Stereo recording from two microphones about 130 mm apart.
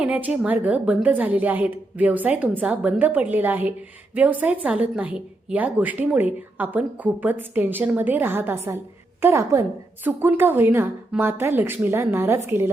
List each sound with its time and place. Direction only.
0.0 s a woman's voice: 10° right (ahead or behind)